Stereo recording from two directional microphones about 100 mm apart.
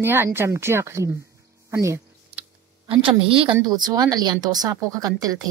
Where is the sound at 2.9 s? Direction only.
70° right (ahead or behind).